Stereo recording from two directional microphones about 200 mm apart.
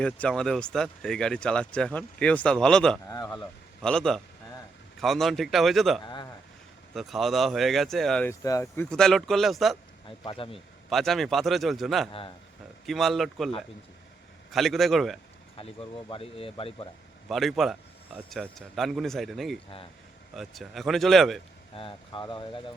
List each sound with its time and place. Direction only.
0.0 s speech: 5° left (ahead or behind)
3.2 s a sound: 5° left (ahead or behind)
4.9 s speech: centre (ahead or behind)
10.1 s speech: 25° left (ahead or behind)
10.8 s speech: centre (ahead or behind)
14.5 s speech: centre (ahead or behind)
15.5 s speech: 25° left (ahead or behind)
17.2 s speech: centre (ahead or behind)
21.8 s speech: 25° left (ahead or behind)